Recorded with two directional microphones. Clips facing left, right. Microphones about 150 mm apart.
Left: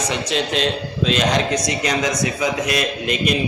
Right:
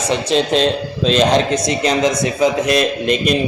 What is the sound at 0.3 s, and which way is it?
A man's voice, 30° right (ahead or behind).